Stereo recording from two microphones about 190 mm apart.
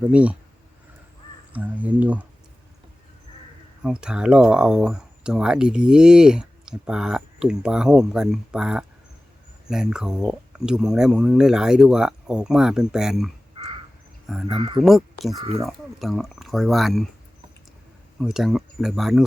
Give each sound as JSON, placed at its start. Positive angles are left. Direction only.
{"t": 0.0, "sound": "speech", "side_deg": -5}
{"t": 1.5, "sound": "speech", "side_deg": -10}
{"t": 3.8, "sound": "speech", "side_deg": -5}
{"t": 13.6, "sound": "crow", "side_deg": -30}
{"t": 14.4, "sound": "speech", "side_deg": -25}
{"t": 14.8, "sound": "speech", "side_deg": 0}
{"t": 18.2, "sound": "speech", "side_deg": 0}